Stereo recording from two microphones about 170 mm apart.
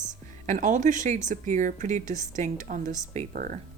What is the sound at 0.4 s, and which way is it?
Speech, 45° right (ahead or behind).